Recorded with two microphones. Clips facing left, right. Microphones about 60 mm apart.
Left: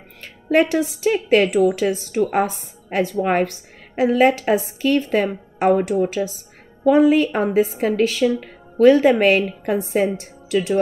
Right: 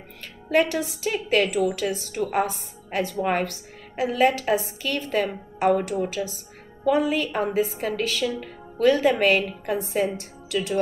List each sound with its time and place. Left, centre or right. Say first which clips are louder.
0.2 s a woman's voice: left 4 dB; left